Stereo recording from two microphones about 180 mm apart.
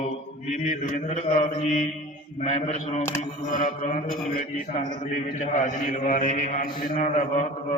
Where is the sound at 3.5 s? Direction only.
50° left (ahead or behind).